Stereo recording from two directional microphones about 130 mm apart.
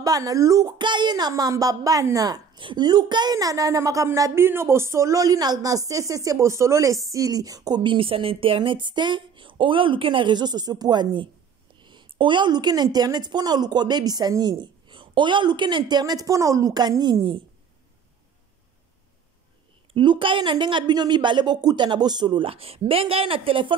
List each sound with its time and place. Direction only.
0.0 s a woman's voice: 25° right (ahead or behind)
19.9 s speech: 40° right (ahead or behind)